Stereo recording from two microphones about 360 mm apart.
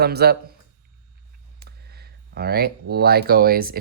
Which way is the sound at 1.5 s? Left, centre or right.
Right.